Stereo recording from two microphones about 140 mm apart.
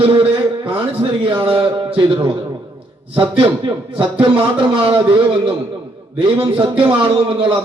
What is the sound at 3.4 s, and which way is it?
A man's voice, 35° right (ahead or behind).